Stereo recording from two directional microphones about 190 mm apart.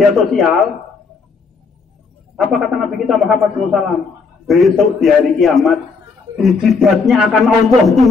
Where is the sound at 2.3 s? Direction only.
Centre (ahead or behind).